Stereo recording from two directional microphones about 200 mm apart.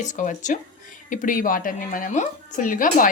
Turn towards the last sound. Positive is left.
turn(degrees=40)  # may be behind; listen again after turning